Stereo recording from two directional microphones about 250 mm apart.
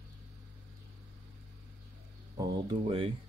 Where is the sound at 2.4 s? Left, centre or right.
Right.